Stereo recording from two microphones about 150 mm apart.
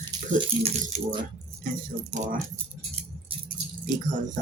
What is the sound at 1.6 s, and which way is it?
Speech, 65° right (ahead or behind).